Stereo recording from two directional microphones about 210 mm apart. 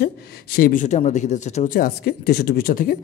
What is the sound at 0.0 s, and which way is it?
Speech, 45° left (ahead or behind).